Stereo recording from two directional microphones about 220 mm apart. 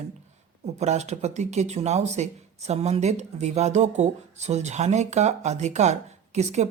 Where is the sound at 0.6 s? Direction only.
30° right (ahead or behind).